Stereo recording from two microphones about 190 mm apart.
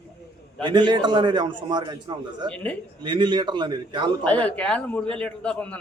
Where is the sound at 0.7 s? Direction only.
25° right (ahead or behind).